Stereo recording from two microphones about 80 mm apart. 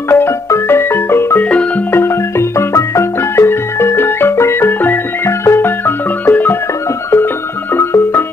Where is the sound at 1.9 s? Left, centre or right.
Left.